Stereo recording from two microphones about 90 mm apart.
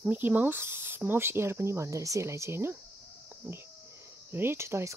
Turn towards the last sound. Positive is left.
turn(degrees=-30)  # may be behind; listen again after turning